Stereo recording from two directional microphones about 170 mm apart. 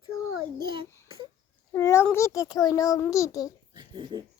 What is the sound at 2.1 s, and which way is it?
A child's voice, 20° left (ahead or behind).